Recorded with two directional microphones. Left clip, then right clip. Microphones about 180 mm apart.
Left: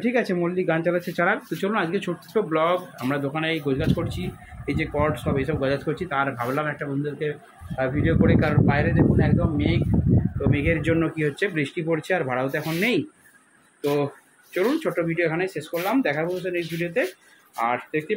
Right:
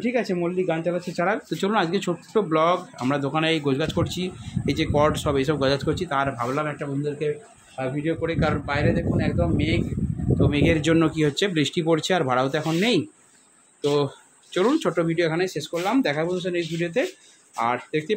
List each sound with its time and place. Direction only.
0.0 s a man's voice: 5° right (ahead or behind)
10.5 s a man's voice: 30° right (ahead or behind)
14.5 s a man's voice: 20° right (ahead or behind)